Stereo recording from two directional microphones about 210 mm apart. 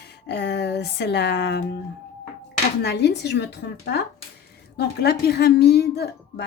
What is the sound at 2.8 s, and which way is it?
Speech, 50° left (ahead or behind).